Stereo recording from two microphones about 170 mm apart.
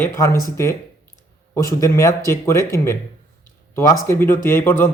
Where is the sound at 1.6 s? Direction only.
20° left (ahead or behind).